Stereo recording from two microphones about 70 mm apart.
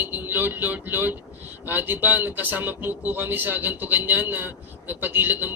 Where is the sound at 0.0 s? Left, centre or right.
Right.